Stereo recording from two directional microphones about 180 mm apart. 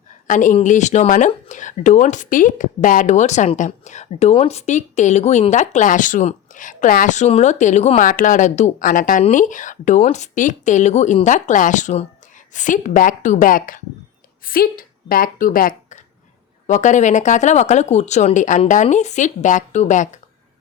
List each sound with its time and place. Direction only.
0.3 s speech: 45° left (ahead or behind)